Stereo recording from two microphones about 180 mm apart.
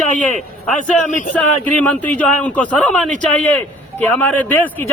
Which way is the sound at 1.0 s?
40° left (ahead or behind).